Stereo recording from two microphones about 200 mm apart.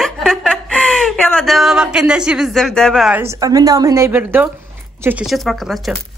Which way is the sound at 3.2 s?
15° right (ahead or behind).